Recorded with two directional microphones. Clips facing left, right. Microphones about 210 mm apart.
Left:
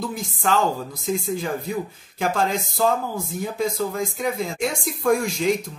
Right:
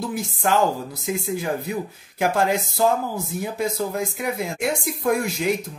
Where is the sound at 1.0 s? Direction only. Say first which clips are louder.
Even; 5° right (ahead or behind).